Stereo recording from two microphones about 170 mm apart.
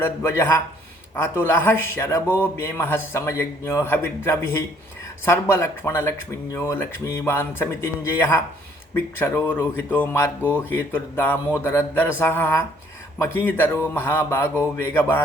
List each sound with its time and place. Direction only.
0.0 s a man's voice: 15° left (ahead or behind)